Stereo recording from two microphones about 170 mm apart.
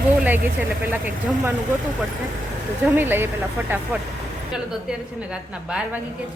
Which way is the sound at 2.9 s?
10° right (ahead or behind).